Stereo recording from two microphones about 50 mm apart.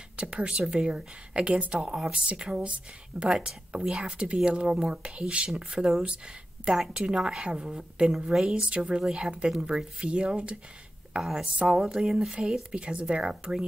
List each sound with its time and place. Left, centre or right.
0.2 s a woman's voice: right
5.8 s speech: centre
6.0 s speech: centre
8.3 s speech: centre
8.5 s a woman's voice: right
11.1 s speech: centre